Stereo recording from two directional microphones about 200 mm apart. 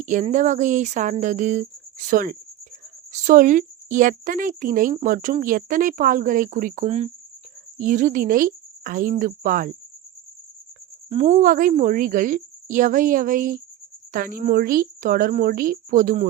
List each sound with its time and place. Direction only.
0.0 s a woman's voice: 40° right (ahead or behind)
11.1 s a woman's voice: 30° right (ahead or behind)